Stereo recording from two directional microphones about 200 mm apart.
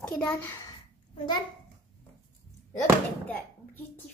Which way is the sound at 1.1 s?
20° left (ahead or behind).